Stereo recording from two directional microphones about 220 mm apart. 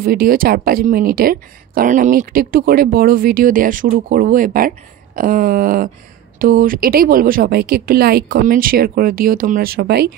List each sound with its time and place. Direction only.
0.0 s speech: 45° right (ahead or behind)